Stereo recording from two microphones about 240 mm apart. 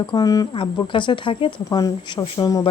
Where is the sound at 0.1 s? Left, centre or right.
Centre.